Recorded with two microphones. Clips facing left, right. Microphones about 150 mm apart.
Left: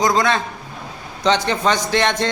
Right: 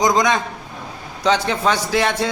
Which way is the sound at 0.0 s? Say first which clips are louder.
Right 1 dB; 20° right (ahead or behind).